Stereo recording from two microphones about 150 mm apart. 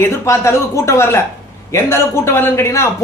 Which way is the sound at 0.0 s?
20° left (ahead or behind).